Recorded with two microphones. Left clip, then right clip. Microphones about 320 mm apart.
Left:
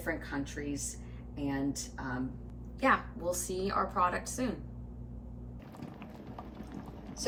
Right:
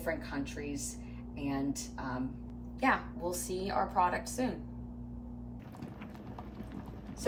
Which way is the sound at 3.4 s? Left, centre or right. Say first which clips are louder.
Left 2 dB; right.